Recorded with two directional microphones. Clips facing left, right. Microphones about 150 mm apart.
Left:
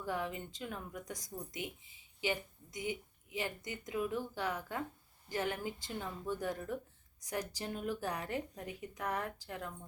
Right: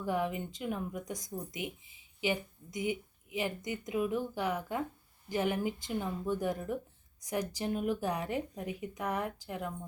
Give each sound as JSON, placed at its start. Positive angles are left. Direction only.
{"t": 0.0, "sound": "speech", "side_deg": -15}